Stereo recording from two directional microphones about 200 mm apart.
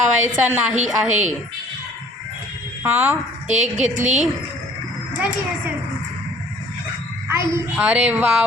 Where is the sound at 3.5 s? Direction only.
35° right (ahead or behind).